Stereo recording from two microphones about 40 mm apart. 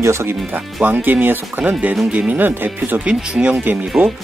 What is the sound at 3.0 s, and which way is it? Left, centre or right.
Speech, right.